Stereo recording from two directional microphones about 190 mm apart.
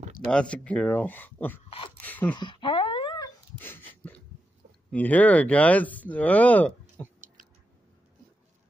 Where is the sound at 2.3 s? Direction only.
25° left (ahead or behind).